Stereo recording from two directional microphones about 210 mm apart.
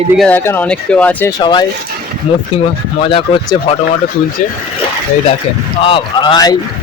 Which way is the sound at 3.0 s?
25° left (ahead or behind).